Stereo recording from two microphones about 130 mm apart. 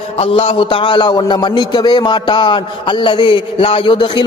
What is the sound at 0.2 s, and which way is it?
A man's voice, 45° left (ahead or behind).